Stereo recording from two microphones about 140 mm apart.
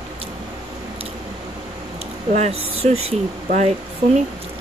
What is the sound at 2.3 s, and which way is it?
Speech, 50° right (ahead or behind).